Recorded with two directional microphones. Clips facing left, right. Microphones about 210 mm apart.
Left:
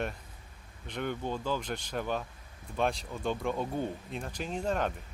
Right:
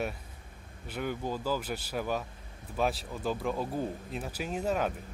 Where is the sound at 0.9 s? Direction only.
5° right (ahead or behind).